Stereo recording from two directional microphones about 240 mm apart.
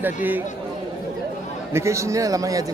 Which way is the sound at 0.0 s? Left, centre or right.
Centre.